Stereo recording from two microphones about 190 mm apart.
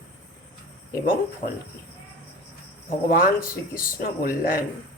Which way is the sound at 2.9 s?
45° left (ahead or behind).